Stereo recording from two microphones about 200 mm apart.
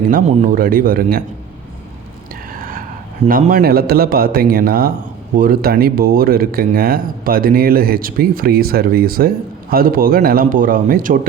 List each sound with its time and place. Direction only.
0.1 s speech: 45° right (ahead or behind)
2.6 s a sound: 45° right (ahead or behind)
3.2 s speech: 45° right (ahead or behind)